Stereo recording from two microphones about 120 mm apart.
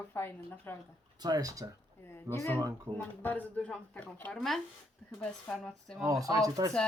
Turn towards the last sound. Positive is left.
turn(degrees=-30)  # may be behind; listen again after turning